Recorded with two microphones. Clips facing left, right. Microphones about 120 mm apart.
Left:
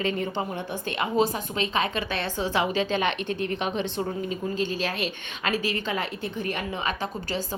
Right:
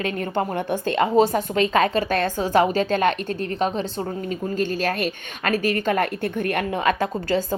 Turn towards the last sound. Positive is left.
turn(degrees=-55)  # may be behind; listen again after turning